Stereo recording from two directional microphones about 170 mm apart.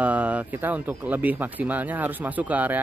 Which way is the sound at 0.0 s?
10° right (ahead or behind).